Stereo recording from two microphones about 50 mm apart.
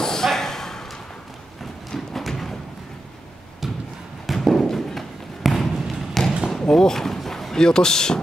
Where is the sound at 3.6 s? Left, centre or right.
Centre.